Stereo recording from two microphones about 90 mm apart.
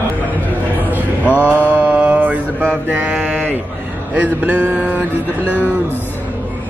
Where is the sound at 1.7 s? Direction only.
15° right (ahead or behind).